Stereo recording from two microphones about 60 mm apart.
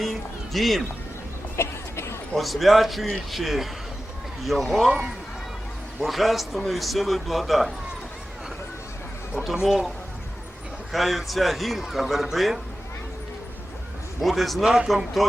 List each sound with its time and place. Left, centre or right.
0.5 s a man's voice: centre
1.5 s vehicle: left
2.3 s a man's voice: centre
4.9 s speech: centre
6.0 s a man's voice: centre
9.6 s a man's voice: centre
10.9 s a man's voice: centre
14.2 s a man's voice: centre
14.8 s a man's voice: centre